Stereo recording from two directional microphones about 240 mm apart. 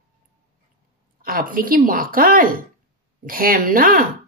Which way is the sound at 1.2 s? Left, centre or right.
Right.